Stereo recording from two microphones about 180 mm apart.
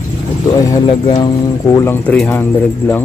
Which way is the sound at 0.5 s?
20° left (ahead or behind).